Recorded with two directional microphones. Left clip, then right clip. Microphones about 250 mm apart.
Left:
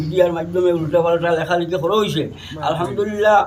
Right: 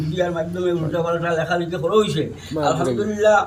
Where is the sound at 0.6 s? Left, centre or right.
Left.